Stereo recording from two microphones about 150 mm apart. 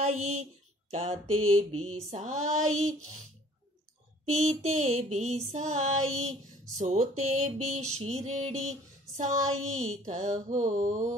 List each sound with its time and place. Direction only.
0.0 s mantra: 45° right (ahead or behind)
2.1 s music: 50° right (ahead or behind)
4.3 s music: 45° right (ahead or behind)
9.8 s music: 50° right (ahead or behind)